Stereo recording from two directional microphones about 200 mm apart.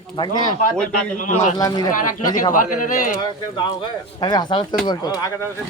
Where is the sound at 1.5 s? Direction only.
20° left (ahead or behind).